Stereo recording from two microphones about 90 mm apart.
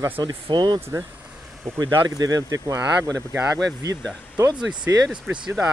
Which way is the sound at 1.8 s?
45° right (ahead or behind).